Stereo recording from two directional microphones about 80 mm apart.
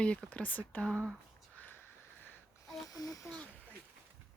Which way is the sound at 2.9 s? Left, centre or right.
Left.